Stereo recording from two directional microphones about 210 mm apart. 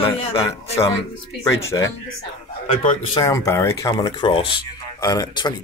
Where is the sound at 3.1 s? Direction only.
15° left (ahead or behind).